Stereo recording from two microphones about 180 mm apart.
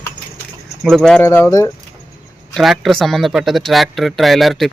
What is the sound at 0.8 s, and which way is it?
Speech, centre (ahead or behind).